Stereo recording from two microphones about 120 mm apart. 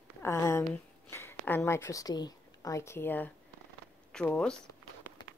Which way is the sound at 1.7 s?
25° left (ahead or behind).